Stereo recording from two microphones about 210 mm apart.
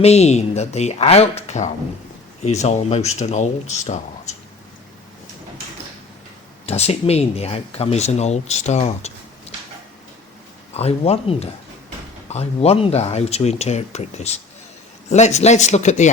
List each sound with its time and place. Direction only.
0.0 s speech: 30° left (ahead or behind)
6.7 s speech: 30° left (ahead or behind)
10.8 s speech: 30° left (ahead or behind)